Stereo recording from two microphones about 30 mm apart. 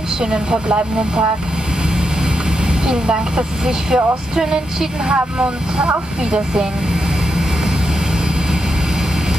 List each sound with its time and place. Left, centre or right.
0.2 s speech: right
2.9 s speech: right